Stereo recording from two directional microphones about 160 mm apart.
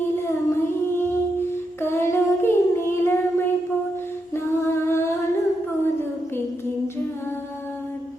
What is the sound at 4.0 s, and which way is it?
Humming, 15° left (ahead or behind).